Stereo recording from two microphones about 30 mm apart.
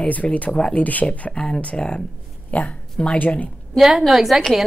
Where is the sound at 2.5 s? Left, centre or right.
Left.